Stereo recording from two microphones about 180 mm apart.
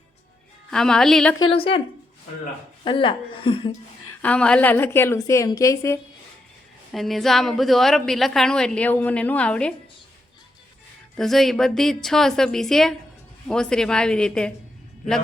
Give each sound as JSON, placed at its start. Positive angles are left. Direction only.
{"t": 0.7, "sound": "a woman's voice", "side_deg": 5}
{"t": 1.5, "sound": "a woman's voice", "side_deg": 30}
{"t": 2.8, "sound": "a woman's voice", "side_deg": 30}
{"t": 4.2, "sound": "a woman's voice", "side_deg": 5}
{"t": 6.9, "sound": "a woman's voice", "side_deg": 0}
{"t": 11.2, "sound": "a woman's voice", "side_deg": 0}